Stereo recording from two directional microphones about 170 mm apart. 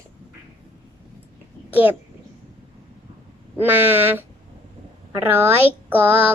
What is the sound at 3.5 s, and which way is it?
Speech, 10° right (ahead or behind).